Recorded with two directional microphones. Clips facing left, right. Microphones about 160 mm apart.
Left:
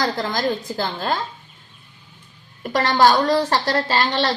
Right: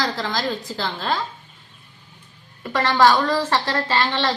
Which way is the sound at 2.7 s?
35° left (ahead or behind).